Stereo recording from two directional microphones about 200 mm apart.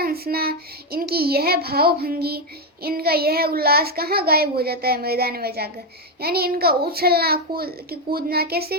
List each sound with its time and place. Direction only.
0.0 s a child's voice: 50° right (ahead or behind)